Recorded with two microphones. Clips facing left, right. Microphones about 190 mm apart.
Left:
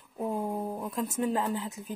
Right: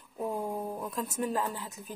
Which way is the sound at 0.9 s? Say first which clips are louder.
Left 4 dB; 20° left (ahead or behind).